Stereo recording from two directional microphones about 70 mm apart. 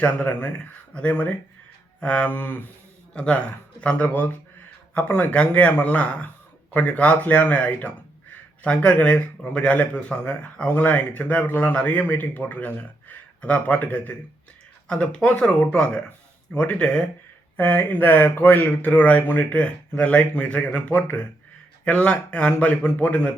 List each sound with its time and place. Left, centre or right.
0.0 s speech: left
3.1 s speech: centre
9.7 s speech: left
17.6 s speech: left